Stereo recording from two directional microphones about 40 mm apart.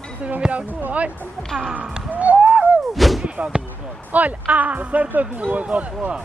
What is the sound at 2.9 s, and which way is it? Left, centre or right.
Artillery fire, centre.